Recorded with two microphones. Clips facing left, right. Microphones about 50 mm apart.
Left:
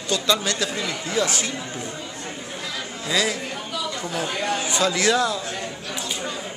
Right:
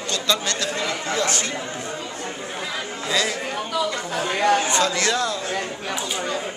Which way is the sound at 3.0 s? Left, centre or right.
Centre.